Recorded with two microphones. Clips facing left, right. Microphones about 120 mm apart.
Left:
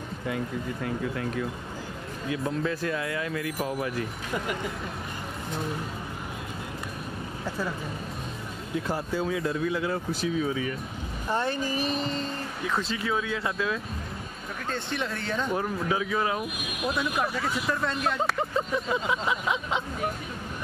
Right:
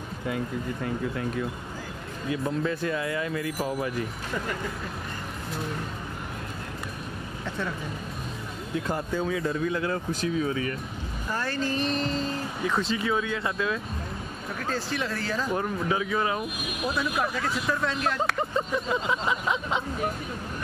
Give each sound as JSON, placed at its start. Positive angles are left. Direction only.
{"t": 2.3, "sound": "speech", "side_deg": 0}
{"t": 7.4, "sound": "speech", "side_deg": 5}
{"t": 8.8, "sound": "speech", "side_deg": 5}
{"t": 11.2, "sound": "speech", "side_deg": 20}
{"t": 11.7, "sound": "speech", "side_deg": 5}